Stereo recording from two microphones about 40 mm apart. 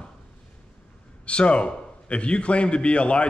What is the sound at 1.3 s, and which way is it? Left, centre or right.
A man's voice, left.